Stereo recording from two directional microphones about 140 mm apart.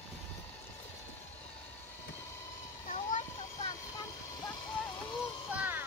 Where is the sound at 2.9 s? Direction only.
60° left (ahead or behind).